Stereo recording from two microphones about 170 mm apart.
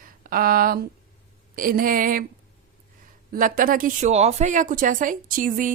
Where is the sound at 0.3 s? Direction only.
60° right (ahead or behind).